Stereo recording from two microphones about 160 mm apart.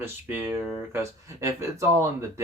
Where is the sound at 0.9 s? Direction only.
20° right (ahead or behind).